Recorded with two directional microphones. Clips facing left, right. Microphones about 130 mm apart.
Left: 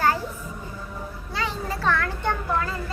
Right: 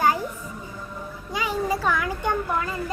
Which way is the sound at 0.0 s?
15° right (ahead or behind).